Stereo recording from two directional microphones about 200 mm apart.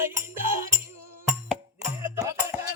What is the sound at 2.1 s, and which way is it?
Music, 15° right (ahead or behind).